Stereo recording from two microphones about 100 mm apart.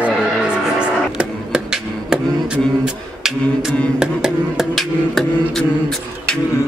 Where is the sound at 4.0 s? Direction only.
5° right (ahead or behind).